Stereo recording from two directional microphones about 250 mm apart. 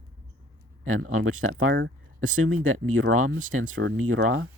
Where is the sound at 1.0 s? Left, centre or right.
Right.